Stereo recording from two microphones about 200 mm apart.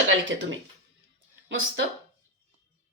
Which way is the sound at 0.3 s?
70° right (ahead or behind).